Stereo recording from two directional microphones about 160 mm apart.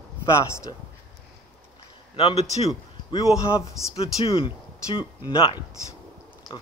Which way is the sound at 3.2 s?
20° left (ahead or behind).